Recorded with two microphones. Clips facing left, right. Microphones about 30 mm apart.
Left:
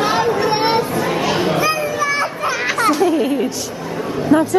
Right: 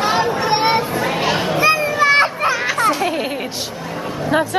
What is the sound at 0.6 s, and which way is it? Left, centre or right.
Children playing, centre.